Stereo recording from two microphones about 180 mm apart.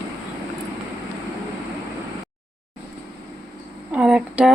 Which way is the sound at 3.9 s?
5° right (ahead or behind).